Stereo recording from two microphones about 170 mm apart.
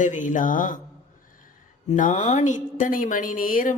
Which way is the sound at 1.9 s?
50° left (ahead or behind).